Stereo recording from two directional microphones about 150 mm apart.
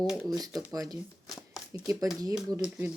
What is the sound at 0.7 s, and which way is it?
Speech, 25° right (ahead or behind).